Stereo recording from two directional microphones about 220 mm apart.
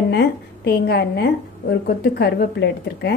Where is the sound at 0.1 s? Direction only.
45° left (ahead or behind).